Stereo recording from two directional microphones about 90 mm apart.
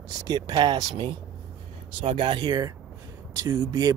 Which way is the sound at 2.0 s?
70° right (ahead or behind).